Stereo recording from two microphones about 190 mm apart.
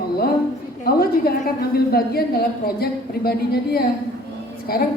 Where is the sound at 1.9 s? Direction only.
55° left (ahead or behind).